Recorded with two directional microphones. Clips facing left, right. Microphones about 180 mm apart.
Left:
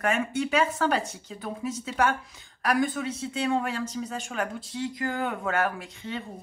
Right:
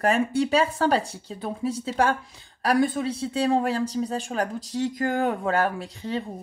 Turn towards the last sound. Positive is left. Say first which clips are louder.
# right 6 dB
turn(degrees=-35)  # may be behind; listen again after turning